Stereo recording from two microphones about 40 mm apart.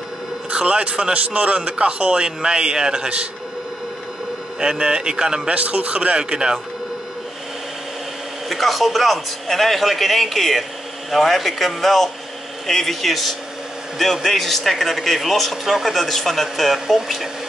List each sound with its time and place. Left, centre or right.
0.5 s a man's voice: right
4.6 s a man's voice: right
5.6 s a man's voice: right
8.5 s speech: centre